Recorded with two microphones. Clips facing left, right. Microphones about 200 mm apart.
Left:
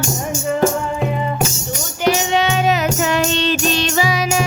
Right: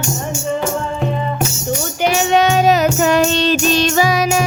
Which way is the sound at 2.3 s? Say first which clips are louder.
Right 4 dB; 45° right (ahead or behind).